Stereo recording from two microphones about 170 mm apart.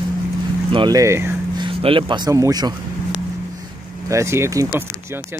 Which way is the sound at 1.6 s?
30° right (ahead or behind).